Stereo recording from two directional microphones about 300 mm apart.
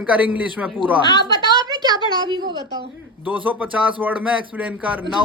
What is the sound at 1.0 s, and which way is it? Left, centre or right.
Speech, centre.